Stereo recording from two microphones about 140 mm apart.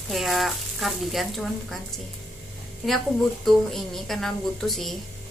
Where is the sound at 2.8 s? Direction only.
Centre (ahead or behind).